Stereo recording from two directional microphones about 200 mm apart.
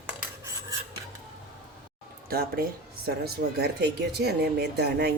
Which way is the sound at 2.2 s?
50° right (ahead or behind).